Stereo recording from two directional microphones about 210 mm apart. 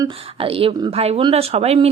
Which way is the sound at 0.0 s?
25° right (ahead or behind).